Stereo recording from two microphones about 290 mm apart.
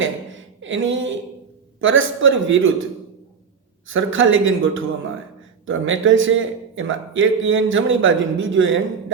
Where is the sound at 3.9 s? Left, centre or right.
Right.